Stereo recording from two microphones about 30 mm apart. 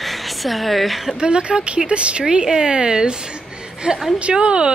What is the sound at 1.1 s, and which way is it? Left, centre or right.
A woman's voice, right.